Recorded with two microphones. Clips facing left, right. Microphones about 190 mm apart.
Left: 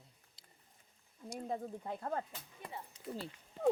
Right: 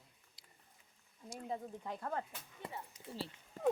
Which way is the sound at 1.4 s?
40° left (ahead or behind).